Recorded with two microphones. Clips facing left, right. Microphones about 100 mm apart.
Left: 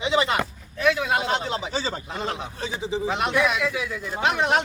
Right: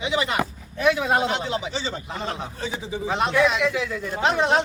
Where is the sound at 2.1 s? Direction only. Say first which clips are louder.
Even; 30° right (ahead or behind).